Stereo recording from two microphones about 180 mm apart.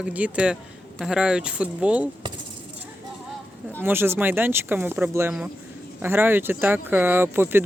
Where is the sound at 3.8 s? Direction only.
10° right (ahead or behind).